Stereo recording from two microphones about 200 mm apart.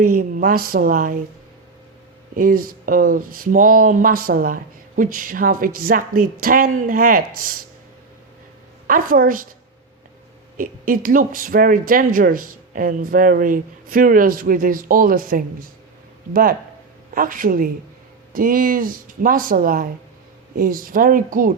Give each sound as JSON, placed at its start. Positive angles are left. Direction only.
{"t": 0.0, "sound": "speech", "side_deg": -45}
{"t": 2.3, "sound": "speech", "side_deg": -45}
{"t": 8.9, "sound": "speech", "side_deg": -45}
{"t": 10.6, "sound": "speech", "side_deg": -45}